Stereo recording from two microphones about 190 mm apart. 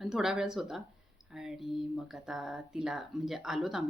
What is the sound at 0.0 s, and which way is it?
A woman's voice, centre (ahead or behind).